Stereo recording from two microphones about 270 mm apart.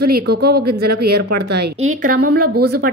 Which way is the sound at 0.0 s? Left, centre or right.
Right.